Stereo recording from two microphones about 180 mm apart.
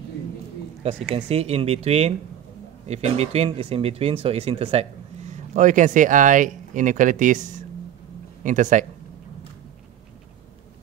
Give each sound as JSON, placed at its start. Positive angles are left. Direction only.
{"t": 0.8, "sound": "speech", "side_deg": -35}